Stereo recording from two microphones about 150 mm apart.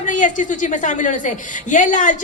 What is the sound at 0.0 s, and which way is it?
A woman's voice, 55° left (ahead or behind).